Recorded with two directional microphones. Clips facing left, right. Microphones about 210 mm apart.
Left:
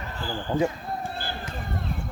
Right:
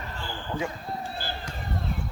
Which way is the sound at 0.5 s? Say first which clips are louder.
Left 7 dB; 45° left (ahead or behind).